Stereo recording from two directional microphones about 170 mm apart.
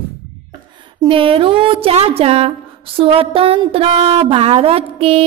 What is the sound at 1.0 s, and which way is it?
A woman's voice, 30° right (ahead or behind).